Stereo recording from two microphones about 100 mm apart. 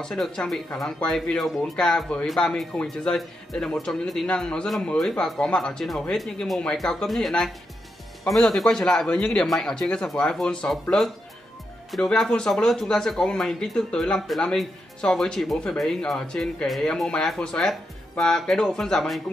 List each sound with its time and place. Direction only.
0.0 s speech: 5° left (ahead or behind)